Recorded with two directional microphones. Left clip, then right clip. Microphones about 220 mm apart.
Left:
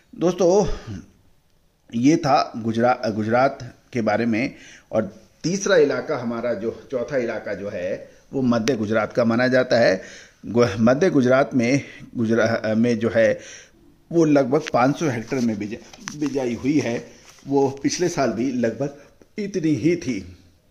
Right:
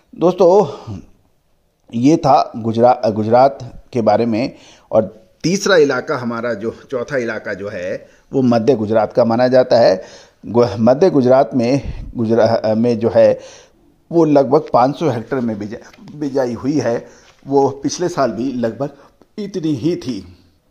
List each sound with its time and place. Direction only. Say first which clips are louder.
0.2 s a man's voice: right 7 dB; 15° right (ahead or behind)
5.4 s speech: right 5 dB; 40° right (ahead or behind)
8.6 s a man's voice: right 8 dB; 10° right (ahead or behind)
15.8 s speech: right 2 dB; 25° right (ahead or behind)
18.4 s speech: right 3 dB; 5° left (ahead or behind)